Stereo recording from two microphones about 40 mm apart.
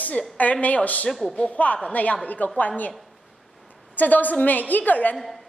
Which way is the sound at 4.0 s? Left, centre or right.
Left.